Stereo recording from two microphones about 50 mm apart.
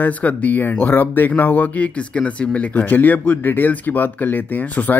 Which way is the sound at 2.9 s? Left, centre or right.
Left.